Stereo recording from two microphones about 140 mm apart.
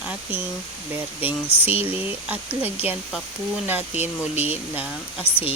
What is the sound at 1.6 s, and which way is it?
Speech, 15° right (ahead or behind).